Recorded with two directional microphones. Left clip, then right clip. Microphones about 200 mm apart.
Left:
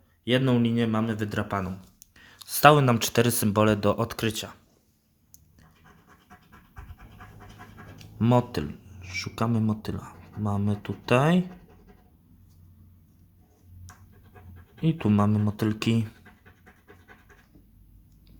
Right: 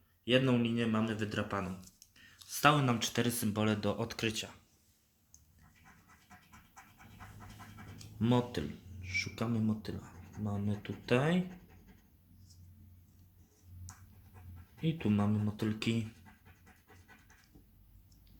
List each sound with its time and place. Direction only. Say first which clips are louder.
0.3 s speech: left 6 dB; 50° left (ahead or behind)
8.2 s speech: left 9 dB; 45° left (ahead or behind)
14.8 s speech: left 9 dB; 45° left (ahead or behind)